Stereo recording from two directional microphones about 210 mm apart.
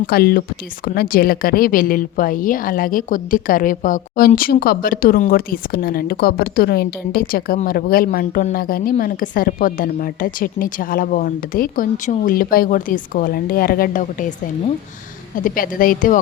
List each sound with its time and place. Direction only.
0.1 s a woman's voice: 45° left (ahead or behind)
15.4 s speech: 40° left (ahead or behind)